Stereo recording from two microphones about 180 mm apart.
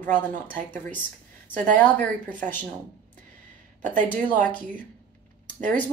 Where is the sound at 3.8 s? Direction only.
45° right (ahead or behind).